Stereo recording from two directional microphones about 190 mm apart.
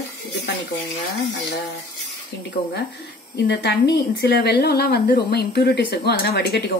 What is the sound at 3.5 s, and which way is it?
A woman's voice, 65° left (ahead or behind).